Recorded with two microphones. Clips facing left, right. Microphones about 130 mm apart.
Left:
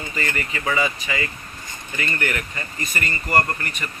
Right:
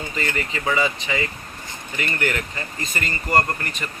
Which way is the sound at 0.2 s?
20° right (ahead or behind).